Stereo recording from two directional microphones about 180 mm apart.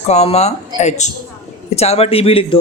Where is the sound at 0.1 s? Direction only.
35° left (ahead or behind).